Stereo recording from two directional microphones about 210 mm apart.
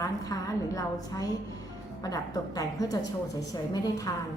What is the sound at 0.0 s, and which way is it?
A woman's voice, 15° left (ahead or behind).